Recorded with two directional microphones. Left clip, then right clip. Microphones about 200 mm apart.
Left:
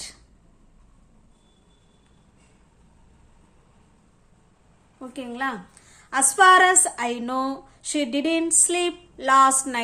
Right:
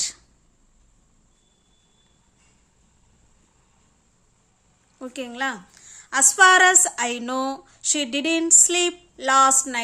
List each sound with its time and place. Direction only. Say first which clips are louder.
4.9 s a woman's voice: right 2 dB; 35° right (ahead or behind); by 9.8 s 20° right (ahead or behind)